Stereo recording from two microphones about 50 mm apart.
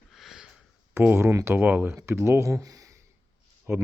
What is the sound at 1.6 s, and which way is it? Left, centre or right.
Speech, right.